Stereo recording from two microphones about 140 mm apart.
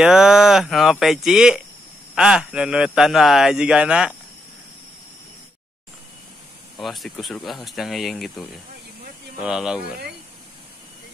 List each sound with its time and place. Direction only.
0.0 s speech: 5° right (ahead or behind)
6.8 s speech: centre (ahead or behind)